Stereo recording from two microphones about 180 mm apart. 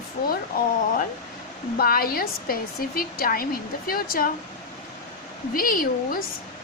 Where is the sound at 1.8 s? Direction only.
55° left (ahead or behind).